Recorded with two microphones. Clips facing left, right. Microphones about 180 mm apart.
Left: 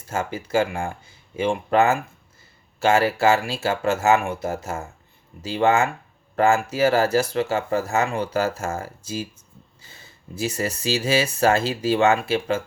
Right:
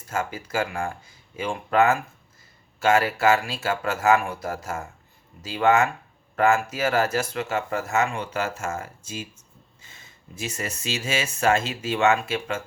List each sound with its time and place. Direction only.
0.1 s speech: 30° left (ahead or behind)